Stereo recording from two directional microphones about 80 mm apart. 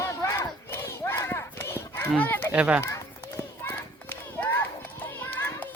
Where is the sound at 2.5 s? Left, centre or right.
Centre.